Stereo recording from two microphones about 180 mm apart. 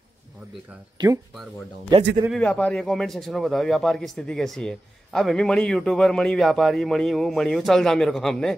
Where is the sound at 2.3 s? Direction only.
5° left (ahead or behind).